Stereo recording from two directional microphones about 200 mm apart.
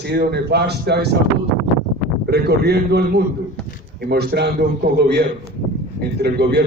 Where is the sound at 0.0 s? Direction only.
55° right (ahead or behind).